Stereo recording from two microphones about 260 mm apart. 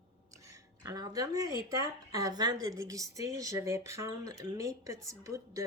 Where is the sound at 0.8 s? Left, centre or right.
Centre.